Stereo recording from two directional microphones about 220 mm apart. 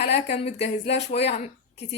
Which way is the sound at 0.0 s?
50° left (ahead or behind).